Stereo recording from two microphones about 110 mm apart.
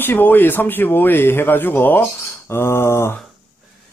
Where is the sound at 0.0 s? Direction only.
20° left (ahead or behind).